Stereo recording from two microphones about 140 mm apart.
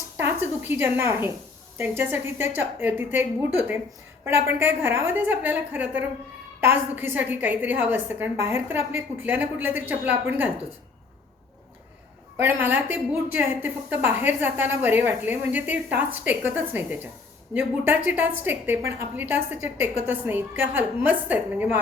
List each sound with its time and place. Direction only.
0.2 s a woman's voice: 15° right (ahead or behind)
12.4 s a woman's voice: 15° right (ahead or behind)